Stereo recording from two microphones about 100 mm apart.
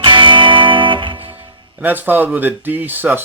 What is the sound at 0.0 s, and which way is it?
Music, 55° right (ahead or behind).